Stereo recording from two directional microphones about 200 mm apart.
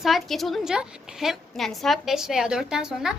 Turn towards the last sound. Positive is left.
turn(degrees=-5)  # may be behind; listen again after turning